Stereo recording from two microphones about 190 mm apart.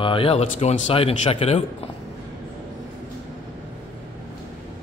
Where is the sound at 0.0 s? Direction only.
30° left (ahead or behind).